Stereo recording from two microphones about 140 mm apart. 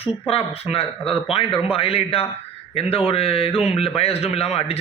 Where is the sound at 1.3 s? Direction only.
40° left (ahead or behind).